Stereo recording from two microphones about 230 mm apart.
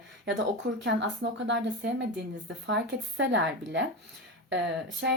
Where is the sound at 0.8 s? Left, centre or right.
Right.